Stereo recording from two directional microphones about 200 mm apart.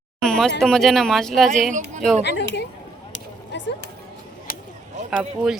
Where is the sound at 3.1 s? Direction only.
65° left (ahead or behind).